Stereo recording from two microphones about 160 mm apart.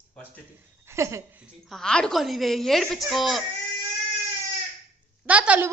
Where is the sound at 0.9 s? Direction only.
20° right (ahead or behind).